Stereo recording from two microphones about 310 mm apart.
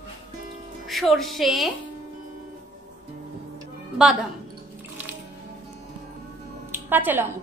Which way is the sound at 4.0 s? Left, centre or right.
Centre.